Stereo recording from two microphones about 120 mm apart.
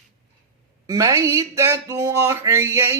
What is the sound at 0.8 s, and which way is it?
Speech, 30° right (ahead or behind).